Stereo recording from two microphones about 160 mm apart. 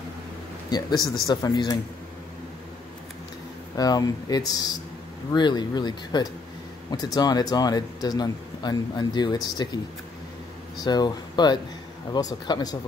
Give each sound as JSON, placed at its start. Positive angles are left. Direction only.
{"t": 0.7, "sound": "a man's voice", "side_deg": 25}
{"t": 3.7, "sound": "speech", "side_deg": 25}
{"t": 10.8, "sound": "speech", "side_deg": 25}